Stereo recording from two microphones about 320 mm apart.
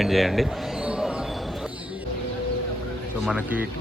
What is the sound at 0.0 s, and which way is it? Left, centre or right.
Basketball bounce, centre.